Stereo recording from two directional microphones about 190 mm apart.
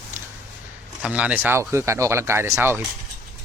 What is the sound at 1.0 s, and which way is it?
Speech, 5° right (ahead or behind).